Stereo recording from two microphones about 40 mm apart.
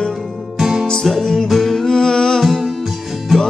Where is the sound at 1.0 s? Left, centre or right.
Centre.